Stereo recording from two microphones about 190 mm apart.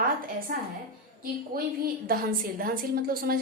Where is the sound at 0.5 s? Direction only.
50° right (ahead or behind).